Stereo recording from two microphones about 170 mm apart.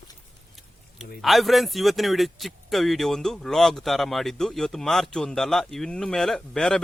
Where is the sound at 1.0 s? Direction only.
Centre (ahead or behind).